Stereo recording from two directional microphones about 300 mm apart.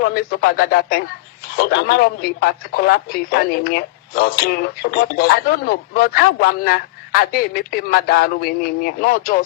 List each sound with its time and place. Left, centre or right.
0.0 s speech: left